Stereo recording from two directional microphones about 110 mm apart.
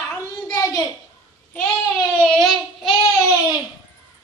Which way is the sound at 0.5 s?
30° left (ahead or behind).